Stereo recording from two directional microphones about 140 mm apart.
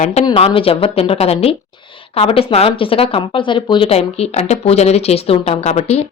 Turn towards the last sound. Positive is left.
turn(degrees=50)  # may be behind; listen again after turning